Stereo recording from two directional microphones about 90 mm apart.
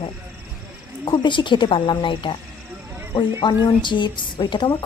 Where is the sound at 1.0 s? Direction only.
55° left (ahead or behind).